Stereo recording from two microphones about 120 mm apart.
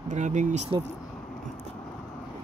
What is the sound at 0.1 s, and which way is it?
Speech, 85° right.